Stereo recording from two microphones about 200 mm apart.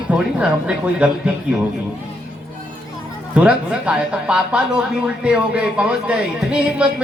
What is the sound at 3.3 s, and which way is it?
Speech, 5° right (ahead or behind).